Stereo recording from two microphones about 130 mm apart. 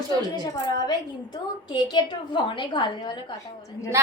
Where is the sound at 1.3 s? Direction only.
35° left (ahead or behind).